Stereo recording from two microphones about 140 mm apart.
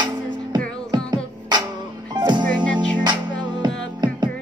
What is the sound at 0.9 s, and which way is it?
Music, 30° right (ahead or behind).